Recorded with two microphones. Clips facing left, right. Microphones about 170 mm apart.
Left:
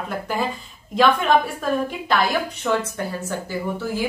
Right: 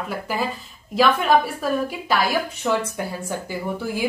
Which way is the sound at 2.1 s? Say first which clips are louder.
Left 1 dB; 10° right (ahead or behind).